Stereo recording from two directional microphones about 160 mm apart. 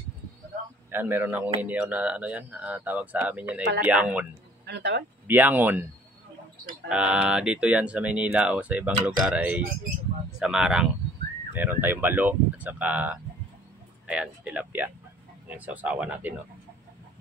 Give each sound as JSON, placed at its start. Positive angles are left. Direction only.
{"t": 0.8, "sound": "speech", "side_deg": -15}
{"t": 4.6, "sound": "speech", "side_deg": -90}
{"t": 5.2, "sound": "speech", "side_deg": -10}
{"t": 6.9, "sound": "speech", "side_deg": -5}